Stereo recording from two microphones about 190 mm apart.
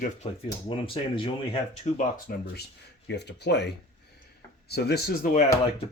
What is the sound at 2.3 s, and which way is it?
Speech, 50° left (ahead or behind).